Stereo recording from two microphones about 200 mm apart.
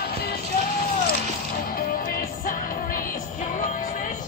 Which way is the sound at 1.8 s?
45° left (ahead or behind).